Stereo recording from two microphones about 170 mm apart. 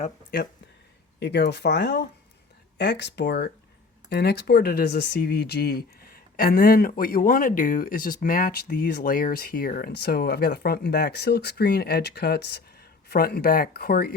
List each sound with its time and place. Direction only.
1.2 s speech: 80° left
4.1 s speech: 70° left (ahead or behind)
13.1 s speech: 65° left (ahead or behind)